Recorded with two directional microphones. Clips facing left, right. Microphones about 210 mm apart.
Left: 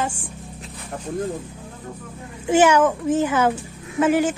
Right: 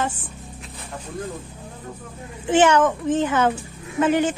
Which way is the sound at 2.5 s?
10° left (ahead or behind).